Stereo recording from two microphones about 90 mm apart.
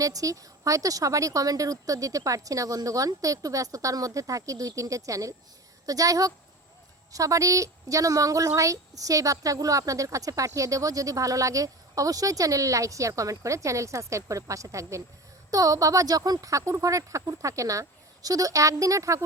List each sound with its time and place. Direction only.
0.0 s a woman's voice: 40° right (ahead or behind)